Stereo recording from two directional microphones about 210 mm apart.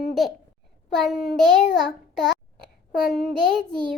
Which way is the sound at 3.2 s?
Centre (ahead or behind).